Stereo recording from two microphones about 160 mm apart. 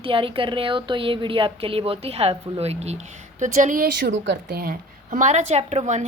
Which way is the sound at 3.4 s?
50° right (ahead or behind).